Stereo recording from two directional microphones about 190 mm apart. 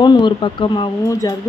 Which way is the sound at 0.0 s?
25° left (ahead or behind).